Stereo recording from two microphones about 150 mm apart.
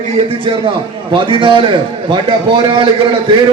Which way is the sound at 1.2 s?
35° right (ahead or behind).